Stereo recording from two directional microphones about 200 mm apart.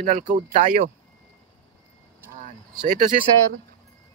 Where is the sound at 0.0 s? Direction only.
35° right (ahead or behind).